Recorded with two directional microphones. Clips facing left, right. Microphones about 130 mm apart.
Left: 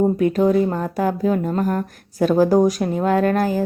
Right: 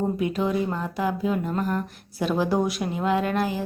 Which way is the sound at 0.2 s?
45° left (ahead or behind).